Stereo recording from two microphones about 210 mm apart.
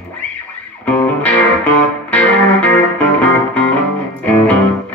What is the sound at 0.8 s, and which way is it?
Music, 5° left (ahead or behind).